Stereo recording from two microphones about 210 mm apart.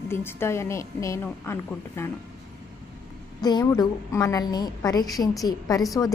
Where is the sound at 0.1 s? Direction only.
10° left (ahead or behind).